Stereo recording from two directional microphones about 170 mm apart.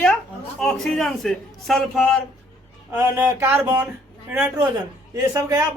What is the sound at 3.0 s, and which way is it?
Speech, 15° right (ahead or behind).